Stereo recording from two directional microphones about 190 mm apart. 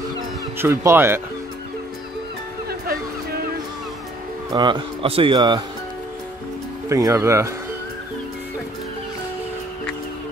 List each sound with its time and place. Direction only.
0.6 s speech: 15° right (ahead or behind)
2.7 s music: 55° right (ahead or behind)
4.5 s speech: 25° right (ahead or behind)
6.9 s speech: 15° right (ahead or behind)